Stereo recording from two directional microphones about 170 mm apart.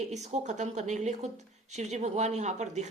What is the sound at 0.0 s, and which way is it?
Speech, 40° right (ahead or behind).